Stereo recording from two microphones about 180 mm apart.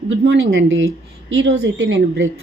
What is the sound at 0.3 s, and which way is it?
A woman's voice, 90° right.